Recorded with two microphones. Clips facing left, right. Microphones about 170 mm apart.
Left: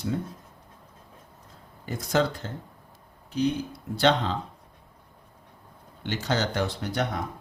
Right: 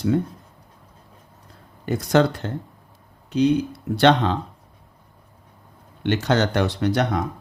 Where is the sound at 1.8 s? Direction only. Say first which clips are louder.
Right 7 dB; 70° right (ahead or behind).